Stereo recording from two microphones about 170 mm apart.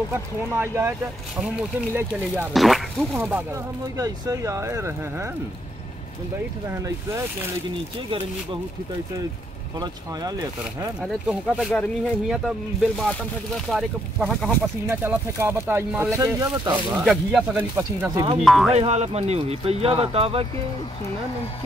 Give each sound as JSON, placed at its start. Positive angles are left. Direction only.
{"t": 0.1, "sound": "speech", "side_deg": -15}
{"t": 2.5, "sound": "speech", "side_deg": 0}
{"t": 3.2, "sound": "speech", "side_deg": -10}
{"t": 11.0, "sound": "speech", "side_deg": -5}
{"t": 14.9, "sound": "speech", "side_deg": -15}
{"t": 16.9, "sound": "speech", "side_deg": -5}
{"t": 18.4, "sound": "speech", "side_deg": 0}
{"t": 18.7, "sound": "speech", "side_deg": -40}